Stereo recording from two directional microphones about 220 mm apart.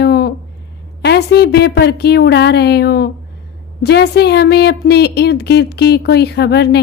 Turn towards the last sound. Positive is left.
turn(degrees=50)  # may be behind; listen again after turning